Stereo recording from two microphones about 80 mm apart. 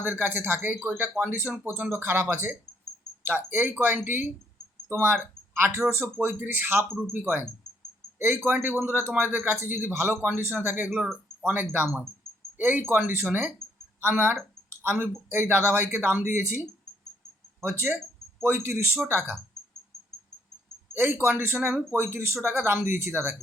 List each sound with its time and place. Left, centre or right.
0.0 s speech: right
1.9 s speech: right
17.6 s speech: right
20.9 s speech: right